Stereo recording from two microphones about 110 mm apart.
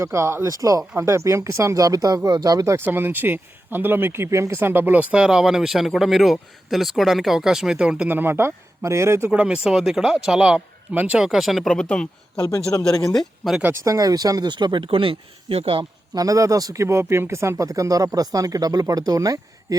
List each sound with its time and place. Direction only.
0.0 s speech: 25° right (ahead or behind)
9.3 s speech: 10° right (ahead or behind); by 12.0 s 5° left (ahead or behind)
12.7 s speech: 35° left (ahead or behind)
13.1 s speech: centre (ahead or behind)
13.8 s speech: 35° right (ahead or behind); by 15.9 s 55° right (ahead or behind)
16.1 s speech: 30° right (ahead or behind)